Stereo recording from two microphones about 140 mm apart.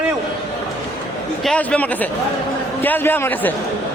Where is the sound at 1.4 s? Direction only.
5° left (ahead or behind).